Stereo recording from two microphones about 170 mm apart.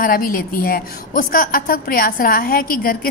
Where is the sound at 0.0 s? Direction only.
55° left (ahead or behind).